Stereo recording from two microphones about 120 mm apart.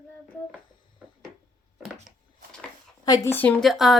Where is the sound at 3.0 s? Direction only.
30° left (ahead or behind).